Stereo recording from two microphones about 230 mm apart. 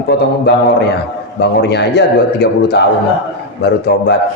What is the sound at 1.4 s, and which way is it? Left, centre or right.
A man's voice, left.